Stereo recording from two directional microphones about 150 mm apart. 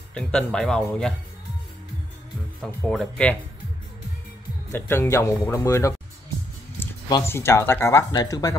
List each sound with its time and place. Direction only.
0.1 s speech: 5° left (ahead or behind)
2.6 s speech: centre (ahead or behind)
4.6 s speech: 15° left (ahead or behind)
6.8 s a sound: 15° left (ahead or behind)
7.2 s speech: 15° left (ahead or behind)